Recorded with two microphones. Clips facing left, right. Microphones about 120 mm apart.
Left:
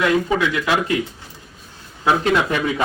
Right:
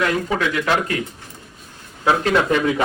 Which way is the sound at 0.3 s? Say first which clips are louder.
Even; 5° left (ahead or behind).